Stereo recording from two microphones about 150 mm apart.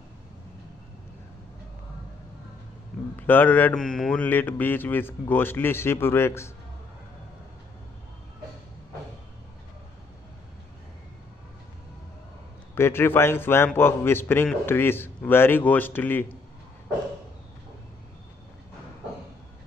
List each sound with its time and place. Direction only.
3.2 s a man's voice: 15° left (ahead or behind)
12.7 s a man's voice: 15° left (ahead or behind)